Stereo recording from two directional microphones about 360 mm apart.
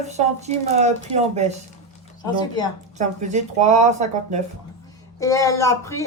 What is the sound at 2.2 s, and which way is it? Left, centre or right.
Speech, centre.